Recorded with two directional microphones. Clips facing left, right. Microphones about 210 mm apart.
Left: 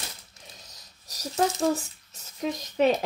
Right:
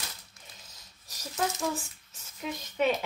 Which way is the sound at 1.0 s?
35° left (ahead or behind).